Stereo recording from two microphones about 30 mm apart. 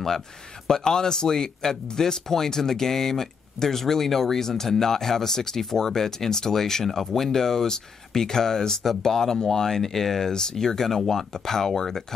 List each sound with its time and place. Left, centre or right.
0.7 s speech: left